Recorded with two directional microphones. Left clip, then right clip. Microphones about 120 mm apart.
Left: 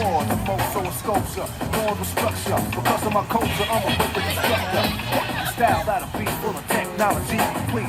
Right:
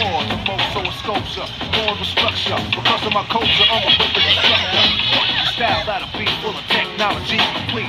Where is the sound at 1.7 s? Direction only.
60° left (ahead or behind); by 5.6 s 80° left.